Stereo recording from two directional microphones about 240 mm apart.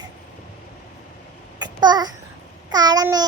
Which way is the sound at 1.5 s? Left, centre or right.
Centre.